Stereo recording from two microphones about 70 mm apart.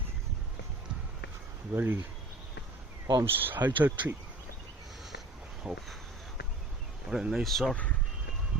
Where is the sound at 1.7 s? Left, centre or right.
Right.